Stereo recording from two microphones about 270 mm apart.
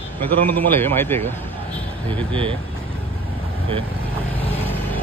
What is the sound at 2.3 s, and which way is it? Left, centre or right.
Speech, centre.